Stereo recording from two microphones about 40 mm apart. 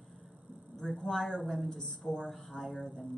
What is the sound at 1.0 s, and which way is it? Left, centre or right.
A woman's voice, centre.